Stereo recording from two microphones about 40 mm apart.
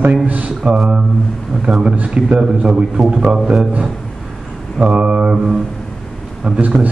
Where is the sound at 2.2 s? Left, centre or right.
Right.